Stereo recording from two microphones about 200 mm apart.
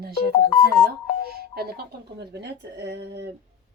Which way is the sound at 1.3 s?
50° right (ahead or behind).